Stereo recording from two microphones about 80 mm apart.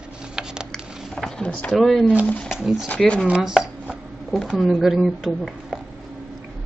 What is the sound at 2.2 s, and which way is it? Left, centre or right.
Speech, centre.